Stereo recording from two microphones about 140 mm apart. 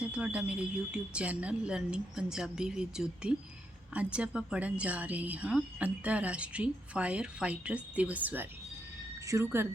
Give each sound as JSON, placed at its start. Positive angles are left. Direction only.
{"t": 0.0, "sound": "a woman's voice", "side_deg": -10}